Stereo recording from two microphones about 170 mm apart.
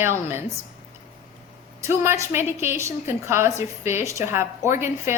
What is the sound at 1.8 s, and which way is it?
A woman's voice, 15° right (ahead or behind).